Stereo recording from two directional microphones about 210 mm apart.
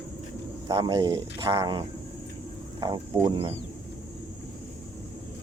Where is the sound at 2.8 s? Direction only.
20° right (ahead or behind).